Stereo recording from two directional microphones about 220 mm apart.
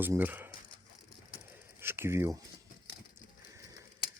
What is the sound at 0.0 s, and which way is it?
Speech, 10° right (ahead or behind).